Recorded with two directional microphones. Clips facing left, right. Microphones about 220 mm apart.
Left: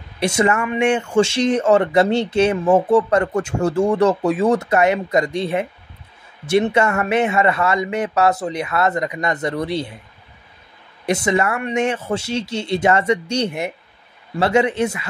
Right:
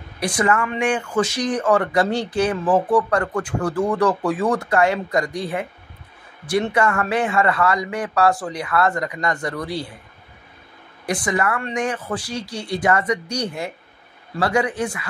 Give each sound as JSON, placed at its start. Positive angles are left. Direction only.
{"t": 0.2, "sound": "speech", "side_deg": 25}
{"t": 11.1, "sound": "speech", "side_deg": 25}